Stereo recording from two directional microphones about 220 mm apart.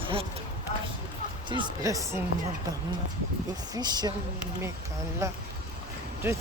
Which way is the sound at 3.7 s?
20° right (ahead or behind).